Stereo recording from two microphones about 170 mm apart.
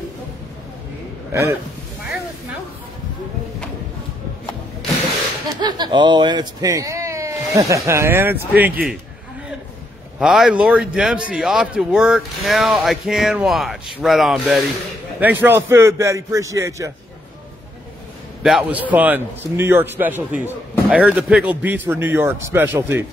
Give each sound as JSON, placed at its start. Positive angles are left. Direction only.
{"t": 1.3, "sound": "a man's voice", "side_deg": -15}
{"t": 5.5, "sound": "speech", "side_deg": -25}
{"t": 10.1, "sound": "a man's voice", "side_deg": -5}
{"t": 18.4, "sound": "a man's voice", "side_deg": -5}